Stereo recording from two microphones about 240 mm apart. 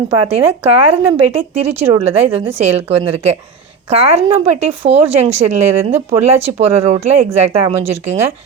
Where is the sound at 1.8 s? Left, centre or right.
Centre.